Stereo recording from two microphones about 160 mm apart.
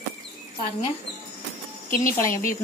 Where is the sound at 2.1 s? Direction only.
15° left (ahead or behind).